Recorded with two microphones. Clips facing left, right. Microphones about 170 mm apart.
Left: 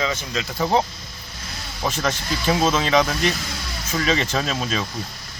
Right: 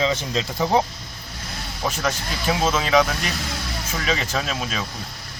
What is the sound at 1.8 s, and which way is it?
Speech, 5° right (ahead or behind).